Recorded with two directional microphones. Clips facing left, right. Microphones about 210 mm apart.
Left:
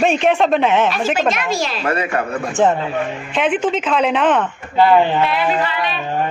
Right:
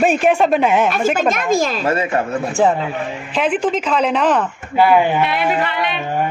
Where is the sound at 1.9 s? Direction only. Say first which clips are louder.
Left 1 dB; 25° right (ahead or behind).